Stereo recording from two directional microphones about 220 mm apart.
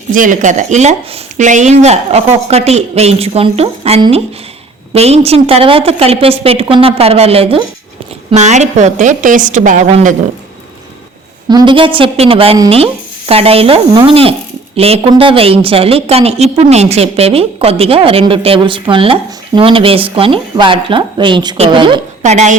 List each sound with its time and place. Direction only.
0.1 s a woman's voice: 35° right (ahead or behind)
11.4 s a woman's voice: 20° right (ahead or behind)
22.2 s a woman's voice: 30° right (ahead or behind)